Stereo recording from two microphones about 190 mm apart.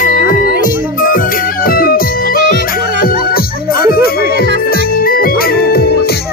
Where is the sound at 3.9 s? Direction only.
50° left (ahead or behind).